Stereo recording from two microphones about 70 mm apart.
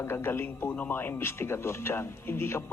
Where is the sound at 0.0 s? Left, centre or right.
Left.